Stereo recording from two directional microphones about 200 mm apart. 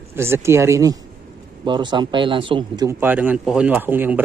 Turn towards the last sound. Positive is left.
turn(degrees=-10)  # may be behind; listen again after turning